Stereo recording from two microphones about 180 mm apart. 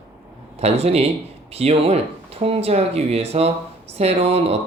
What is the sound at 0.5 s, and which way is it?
Speech, 35° right (ahead or behind).